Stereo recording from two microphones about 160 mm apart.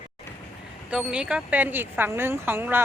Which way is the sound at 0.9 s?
5° right (ahead or behind).